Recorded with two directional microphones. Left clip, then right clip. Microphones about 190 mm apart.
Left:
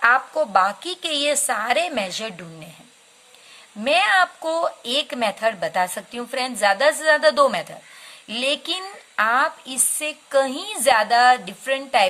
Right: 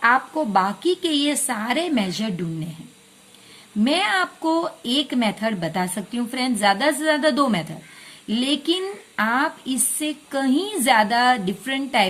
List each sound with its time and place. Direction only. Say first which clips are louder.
0.0 s speech: left 1 dB; 25° left (ahead or behind)
3.8 s speech: left 4 dB; 20° left (ahead or behind)